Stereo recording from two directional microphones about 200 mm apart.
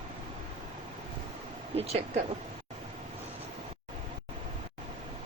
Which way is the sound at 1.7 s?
30° right (ahead or behind).